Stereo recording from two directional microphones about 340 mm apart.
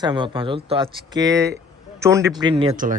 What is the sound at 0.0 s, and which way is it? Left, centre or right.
Speech, centre.